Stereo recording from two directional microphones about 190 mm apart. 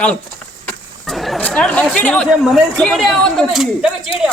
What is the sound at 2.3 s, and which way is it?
Speech, centre (ahead or behind).